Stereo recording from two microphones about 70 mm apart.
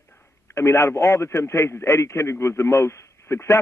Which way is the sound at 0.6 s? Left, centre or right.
Left.